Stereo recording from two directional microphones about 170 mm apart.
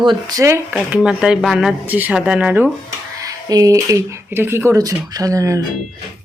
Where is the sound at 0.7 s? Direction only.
5° right (ahead or behind).